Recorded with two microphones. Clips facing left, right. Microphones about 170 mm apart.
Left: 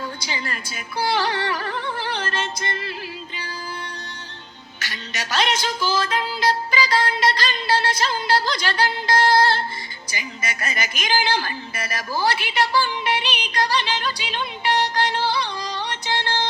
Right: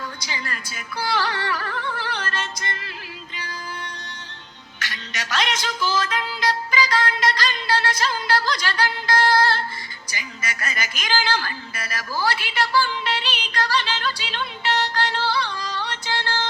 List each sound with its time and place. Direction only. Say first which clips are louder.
0.2 s speech: left 2 dB; 25° left (ahead or behind)
3.3 s music: left 1 dB; 30° left (ahead or behind)
5.1 s music: left 3 dB; 35° left (ahead or behind)
10.1 s a woman's voice: left 2 dB; 20° left (ahead or behind)